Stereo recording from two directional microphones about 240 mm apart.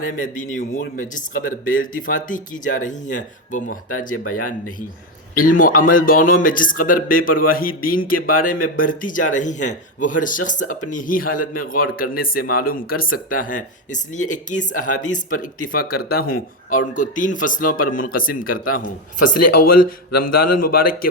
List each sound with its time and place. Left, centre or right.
0.2 s speech: left
4.1 s speech: left
5.3 s speech: left
19.2 s speech: left